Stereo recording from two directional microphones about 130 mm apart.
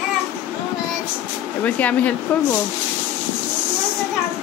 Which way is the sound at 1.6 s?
10° left (ahead or behind).